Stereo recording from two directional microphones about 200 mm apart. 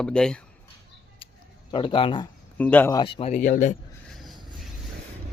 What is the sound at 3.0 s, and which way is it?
Speech, 25° left (ahead or behind).